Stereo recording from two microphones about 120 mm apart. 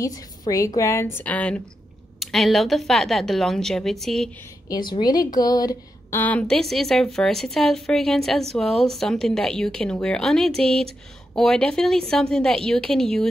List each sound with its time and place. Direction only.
0.0 s a woman's voice: 30° left (ahead or behind); by 4.3 s centre (ahead or behind)
4.6 s a woman's voice: 40° left (ahead or behind)
6.1 s a woman's voice: 10° left (ahead or behind)